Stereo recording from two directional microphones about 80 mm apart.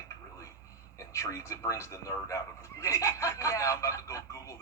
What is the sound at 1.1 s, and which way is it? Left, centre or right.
Speech, left.